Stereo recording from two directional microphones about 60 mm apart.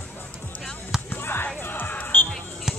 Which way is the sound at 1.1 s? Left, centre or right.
Left.